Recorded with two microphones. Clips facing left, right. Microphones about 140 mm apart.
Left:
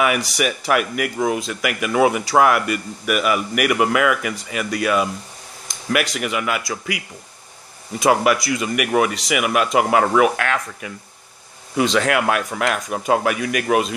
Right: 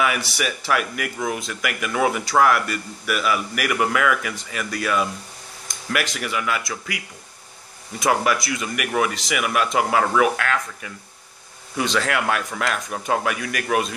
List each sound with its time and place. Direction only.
0.0 s a man's voice: 5° left (ahead or behind)
8.0 s a man's voice: 10° left (ahead or behind)